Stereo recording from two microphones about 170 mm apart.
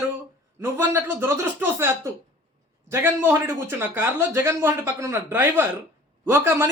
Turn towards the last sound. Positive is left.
turn(degrees=-15)  # may be behind; listen again after turning